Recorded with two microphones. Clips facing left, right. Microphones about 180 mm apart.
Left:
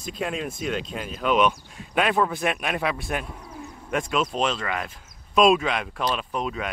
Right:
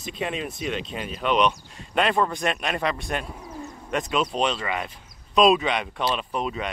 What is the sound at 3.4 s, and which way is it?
Bird, 5° right (ahead or behind).